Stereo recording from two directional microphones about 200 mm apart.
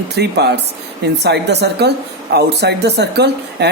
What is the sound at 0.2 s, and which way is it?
Speech, 55° right (ahead or behind).